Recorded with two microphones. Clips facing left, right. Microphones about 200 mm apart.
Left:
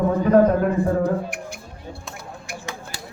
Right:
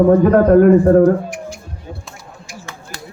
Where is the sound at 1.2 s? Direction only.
55° left (ahead or behind).